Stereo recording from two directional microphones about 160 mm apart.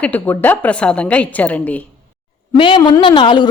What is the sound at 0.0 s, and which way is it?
A woman's voice, 10° left (ahead or behind).